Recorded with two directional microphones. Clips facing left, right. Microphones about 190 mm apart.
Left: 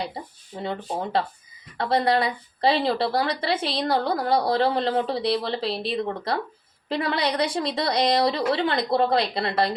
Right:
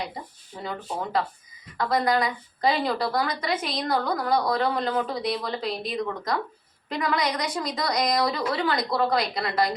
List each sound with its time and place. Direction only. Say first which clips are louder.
0.6 s a woman's voice: left 3 dB; 25° left (ahead or behind)